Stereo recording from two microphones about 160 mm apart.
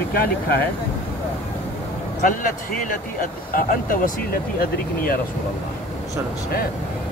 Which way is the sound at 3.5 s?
60° left (ahead or behind).